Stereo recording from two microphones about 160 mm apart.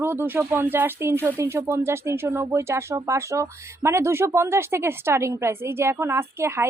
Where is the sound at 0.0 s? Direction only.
15° right (ahead or behind).